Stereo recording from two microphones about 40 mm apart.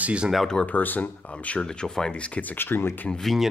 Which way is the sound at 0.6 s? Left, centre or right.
Left.